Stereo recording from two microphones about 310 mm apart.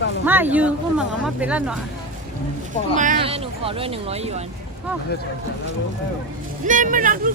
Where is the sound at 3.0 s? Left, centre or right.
Right.